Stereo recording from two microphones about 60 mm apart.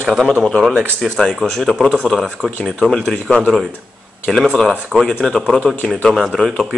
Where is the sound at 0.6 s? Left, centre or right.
Centre.